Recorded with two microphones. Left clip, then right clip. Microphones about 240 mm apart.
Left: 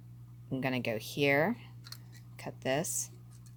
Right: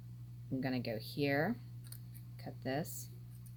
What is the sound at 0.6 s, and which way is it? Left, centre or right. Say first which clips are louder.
Speech: left 6 dB; left.